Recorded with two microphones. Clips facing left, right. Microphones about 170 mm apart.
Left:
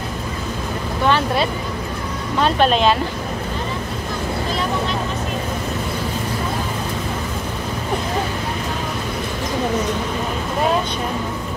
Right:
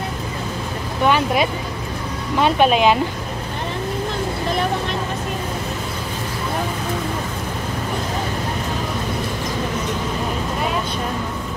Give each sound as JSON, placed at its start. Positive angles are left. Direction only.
{"t": 1.0, "sound": "speech", "side_deg": -10}